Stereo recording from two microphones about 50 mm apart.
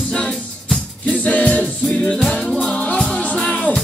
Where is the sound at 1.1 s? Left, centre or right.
Left.